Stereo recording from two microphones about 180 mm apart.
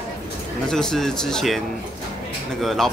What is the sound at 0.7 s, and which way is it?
Speech, 5° left (ahead or behind).